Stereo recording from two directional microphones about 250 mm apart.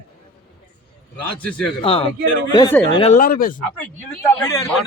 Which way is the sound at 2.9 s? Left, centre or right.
Left.